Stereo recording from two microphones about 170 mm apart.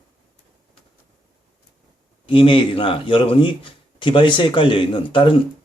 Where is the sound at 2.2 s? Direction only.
30° left (ahead or behind).